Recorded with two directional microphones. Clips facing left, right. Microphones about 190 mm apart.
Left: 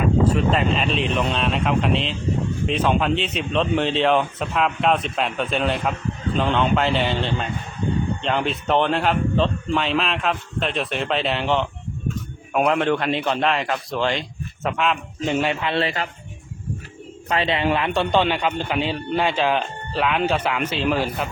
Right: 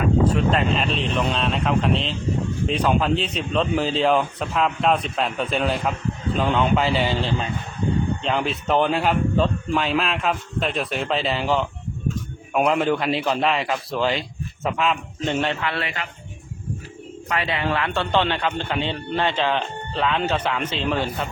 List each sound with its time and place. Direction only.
0.0 s speech: centre (ahead or behind)
15.6 s speech: 25° left (ahead or behind)
17.2 s a man's voice: 25° left (ahead or behind); by 21.2 s 5° left (ahead or behind)